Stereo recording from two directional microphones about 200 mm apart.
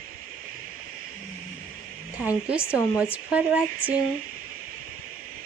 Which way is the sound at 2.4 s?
5° right (ahead or behind).